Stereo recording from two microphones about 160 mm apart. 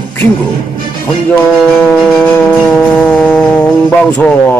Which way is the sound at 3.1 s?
10° left (ahead or behind).